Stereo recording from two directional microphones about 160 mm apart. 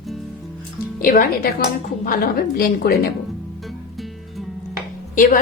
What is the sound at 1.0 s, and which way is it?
A woman's voice, 65° left (ahead or behind).